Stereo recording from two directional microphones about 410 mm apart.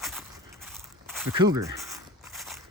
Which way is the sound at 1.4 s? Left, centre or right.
Centre.